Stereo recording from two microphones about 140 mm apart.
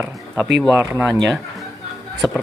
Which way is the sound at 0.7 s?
15° right (ahead or behind).